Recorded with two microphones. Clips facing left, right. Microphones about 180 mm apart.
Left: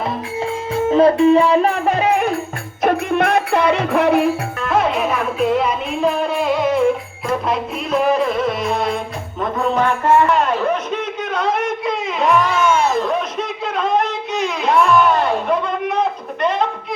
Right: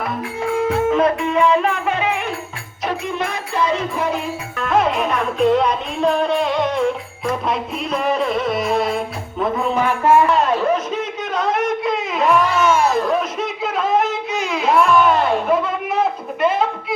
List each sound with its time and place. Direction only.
0.7 s music: 30° left (ahead or behind)
2.8 s music: 60° left (ahead or behind)
4.6 s music: centre (ahead or behind)
10.4 s a sound: centre (ahead or behind)